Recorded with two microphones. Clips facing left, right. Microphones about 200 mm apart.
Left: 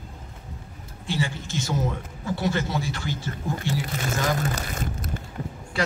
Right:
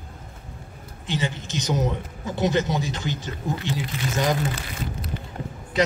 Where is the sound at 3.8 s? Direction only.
45° left (ahead or behind).